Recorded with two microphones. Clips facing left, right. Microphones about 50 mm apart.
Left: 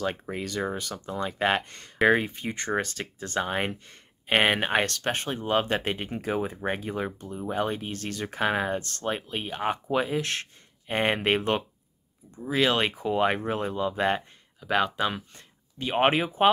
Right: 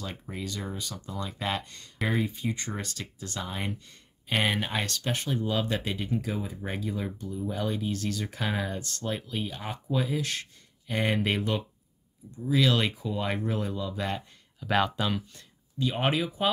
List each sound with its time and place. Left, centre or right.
0.0 s speech: left
1.1 s speech: left
14.6 s speech: centre
15.0 s speech: left